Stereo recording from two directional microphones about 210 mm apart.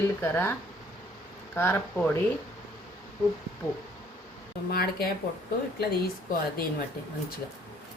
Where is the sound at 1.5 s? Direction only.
10° left (ahead or behind).